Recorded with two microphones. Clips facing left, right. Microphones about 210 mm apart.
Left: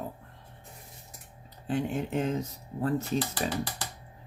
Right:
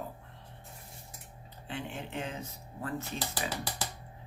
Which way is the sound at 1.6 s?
45° left (ahead or behind).